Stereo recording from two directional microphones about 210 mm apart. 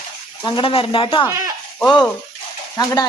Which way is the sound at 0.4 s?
25° left (ahead or behind).